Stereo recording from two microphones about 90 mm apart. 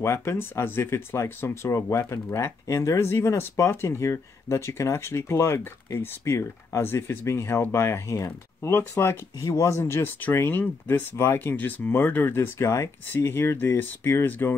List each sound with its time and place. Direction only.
0.0 s speech: 30° left (ahead or behind)